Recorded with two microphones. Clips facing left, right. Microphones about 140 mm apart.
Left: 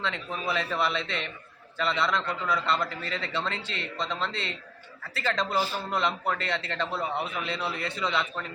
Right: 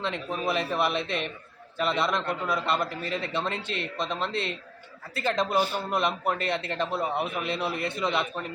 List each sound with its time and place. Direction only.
0.0 s a man's voice: 20° right (ahead or behind)